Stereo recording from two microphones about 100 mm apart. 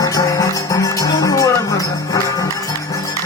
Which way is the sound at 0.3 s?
35° left (ahead or behind).